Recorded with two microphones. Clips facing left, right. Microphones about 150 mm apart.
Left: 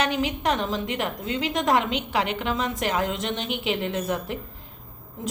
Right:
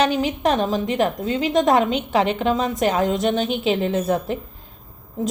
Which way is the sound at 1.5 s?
25° right (ahead or behind).